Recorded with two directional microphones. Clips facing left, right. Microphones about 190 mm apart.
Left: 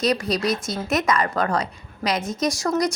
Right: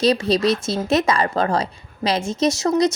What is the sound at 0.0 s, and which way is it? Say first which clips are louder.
Speech: right 5 dB; 30° right (ahead or behind).